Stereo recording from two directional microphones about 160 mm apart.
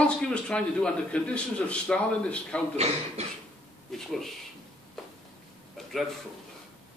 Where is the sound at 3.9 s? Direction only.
Centre (ahead or behind).